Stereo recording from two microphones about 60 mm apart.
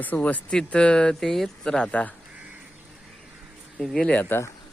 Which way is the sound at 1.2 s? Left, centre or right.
Centre.